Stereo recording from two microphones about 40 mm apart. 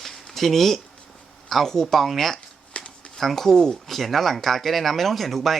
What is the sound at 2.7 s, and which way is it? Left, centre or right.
Shuffling cards, left.